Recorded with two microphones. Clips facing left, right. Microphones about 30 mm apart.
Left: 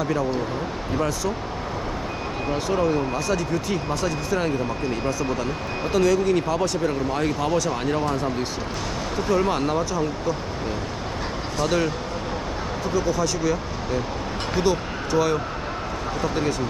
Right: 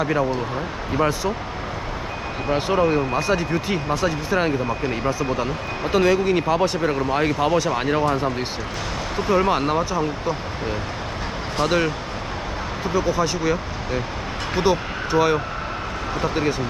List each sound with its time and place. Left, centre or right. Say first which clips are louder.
0.0 s speech: right 2 dB; right
2.5 s speech: right 4 dB; right
12.9 s speech: right 2 dB; right